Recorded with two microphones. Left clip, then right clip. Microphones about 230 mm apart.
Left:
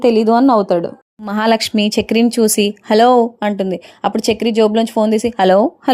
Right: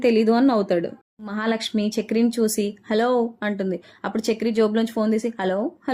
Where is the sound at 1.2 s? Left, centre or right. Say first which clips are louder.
Left 11 dB; left.